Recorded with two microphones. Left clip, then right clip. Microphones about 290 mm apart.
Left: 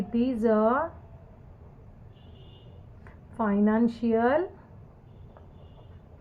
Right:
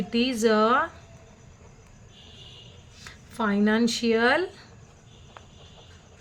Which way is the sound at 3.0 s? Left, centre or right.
Right.